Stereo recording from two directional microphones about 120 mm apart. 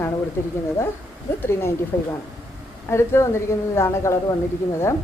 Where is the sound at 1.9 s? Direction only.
15° left (ahead or behind).